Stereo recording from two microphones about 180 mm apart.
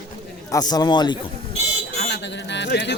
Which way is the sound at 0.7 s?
25° left (ahead or behind).